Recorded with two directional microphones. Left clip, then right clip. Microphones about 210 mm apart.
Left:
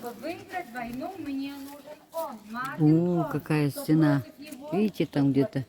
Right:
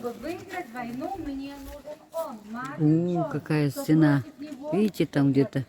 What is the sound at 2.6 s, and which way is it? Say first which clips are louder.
Speech: left 1 dB; 15° left (ahead or behind).